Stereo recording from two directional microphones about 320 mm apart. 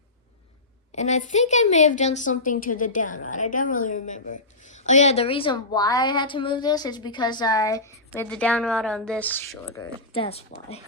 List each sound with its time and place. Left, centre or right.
0.9 s a woman's voice: left; by 9.8 s centre
10.1 s a woman's voice: centre